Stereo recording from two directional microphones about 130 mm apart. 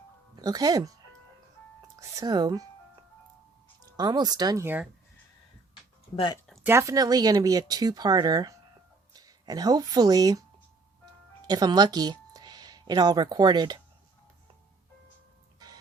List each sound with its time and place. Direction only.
0.3 s speech: 30° right (ahead or behind)
2.0 s speech: 30° right (ahead or behind)
3.9 s speech: 30° right (ahead or behind)
4.6 s speech: 15° right (ahead or behind)
6.6 s speech: 20° right (ahead or behind)
11.4 s speech: 30° right (ahead or behind)